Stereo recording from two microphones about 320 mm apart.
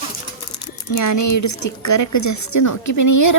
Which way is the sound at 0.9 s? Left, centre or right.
Left.